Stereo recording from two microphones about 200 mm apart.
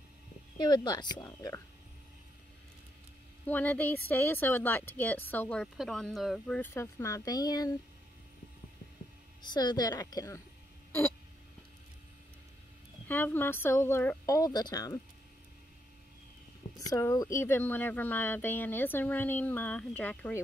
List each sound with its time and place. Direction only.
0.6 s speech: 20° left (ahead or behind)
3.4 s speech: 10° left (ahead or behind)
9.4 s speech: 20° left (ahead or behind)
13.1 s speech: 10° left (ahead or behind)
16.7 s speech: 15° left (ahead or behind)